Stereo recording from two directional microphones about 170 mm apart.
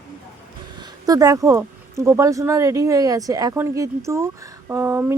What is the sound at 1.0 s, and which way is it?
Speech, 20° right (ahead or behind).